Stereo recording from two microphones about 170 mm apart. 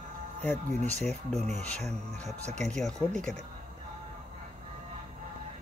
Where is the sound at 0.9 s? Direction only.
Centre (ahead or behind).